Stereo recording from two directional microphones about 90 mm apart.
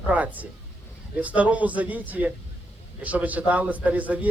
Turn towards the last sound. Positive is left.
turn(degrees=-15)  # may be behind; listen again after turning